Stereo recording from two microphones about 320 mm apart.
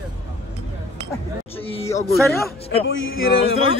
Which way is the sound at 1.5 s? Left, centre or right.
Centre.